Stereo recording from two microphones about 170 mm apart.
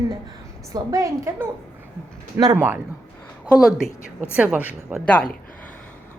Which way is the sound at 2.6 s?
10° right (ahead or behind).